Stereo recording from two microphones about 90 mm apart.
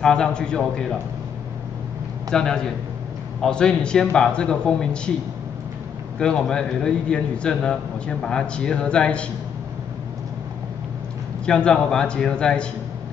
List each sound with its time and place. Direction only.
0.0 s a man's voice: 10° left (ahead or behind)
2.3 s a man's voice: 5° left (ahead or behind)
6.1 s a man's voice: 10° left (ahead or behind)
11.4 s a man's voice: 10° left (ahead or behind)